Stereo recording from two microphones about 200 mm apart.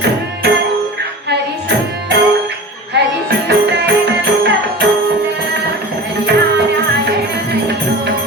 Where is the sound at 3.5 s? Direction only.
60° right (ahead or behind).